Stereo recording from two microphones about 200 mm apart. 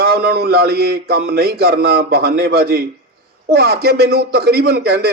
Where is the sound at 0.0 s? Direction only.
50° right (ahead or behind).